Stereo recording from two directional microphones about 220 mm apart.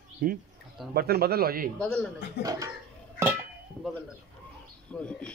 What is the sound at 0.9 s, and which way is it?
Speech, 45° right (ahead or behind).